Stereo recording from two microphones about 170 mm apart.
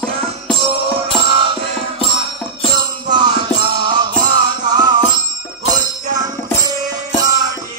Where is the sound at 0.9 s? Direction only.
30° right (ahead or behind).